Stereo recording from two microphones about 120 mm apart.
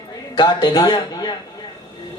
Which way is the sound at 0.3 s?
35° left (ahead or behind).